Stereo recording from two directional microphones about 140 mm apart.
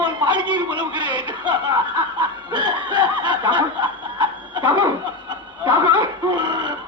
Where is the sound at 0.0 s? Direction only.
30° right (ahead or behind).